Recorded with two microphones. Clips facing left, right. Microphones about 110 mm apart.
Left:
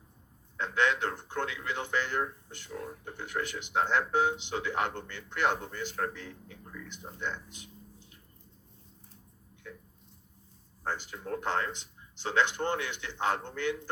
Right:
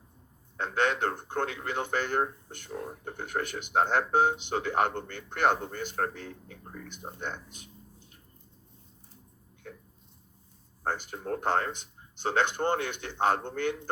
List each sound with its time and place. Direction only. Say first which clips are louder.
0.5 s speech: right 1 dB; 50° right (ahead or behind)
9.6 s a sound: right 1 dB; 50° right (ahead or behind)
10.8 s speech: right 3 dB; 50° right (ahead or behind)